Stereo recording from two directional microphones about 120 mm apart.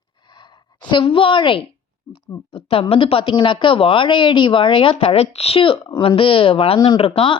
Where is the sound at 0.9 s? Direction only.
45° left (ahead or behind).